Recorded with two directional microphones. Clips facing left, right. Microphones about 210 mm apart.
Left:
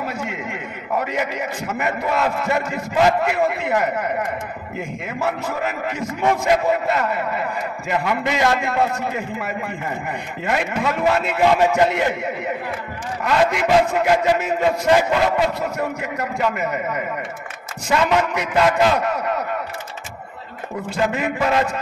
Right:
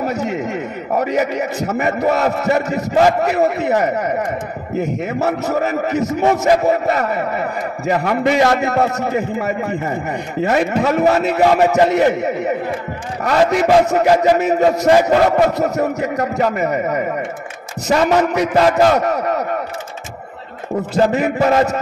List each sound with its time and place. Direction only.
0.1 s a man's voice: 40° right (ahead or behind)
13.5 s a man's voice: 40° right (ahead or behind)
21.0 s a man's voice: 40° right (ahead or behind)